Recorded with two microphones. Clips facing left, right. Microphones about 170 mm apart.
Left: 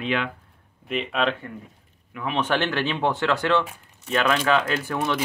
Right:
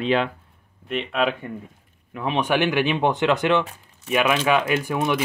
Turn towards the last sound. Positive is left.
turn(degrees=-15)  # may be behind; listen again after turning